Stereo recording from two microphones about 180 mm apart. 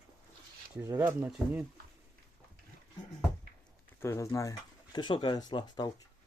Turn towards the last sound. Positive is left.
turn(degrees=25)  # may be behind; listen again after turning